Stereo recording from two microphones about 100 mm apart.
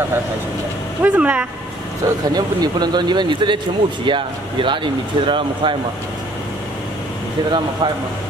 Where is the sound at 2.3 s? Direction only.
45° right (ahead or behind).